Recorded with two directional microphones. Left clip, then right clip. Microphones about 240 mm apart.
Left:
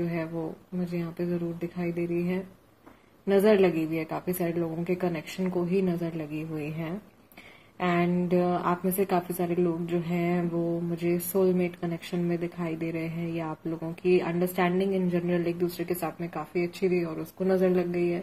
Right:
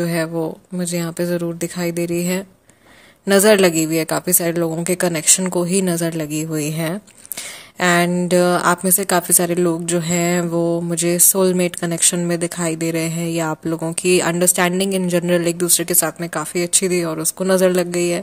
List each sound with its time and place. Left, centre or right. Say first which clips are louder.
0.0 s a woman's voice: right 11 dB; right